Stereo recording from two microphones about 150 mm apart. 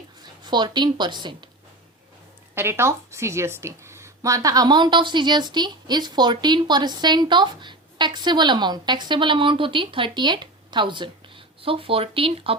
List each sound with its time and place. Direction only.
0.4 s a woman's voice: 30° right (ahead or behind)
2.6 s a woman's voice: 15° right (ahead or behind); by 12.5 s 40° right (ahead or behind)